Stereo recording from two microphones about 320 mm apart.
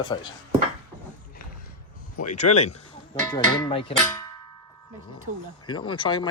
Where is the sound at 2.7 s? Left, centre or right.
Centre.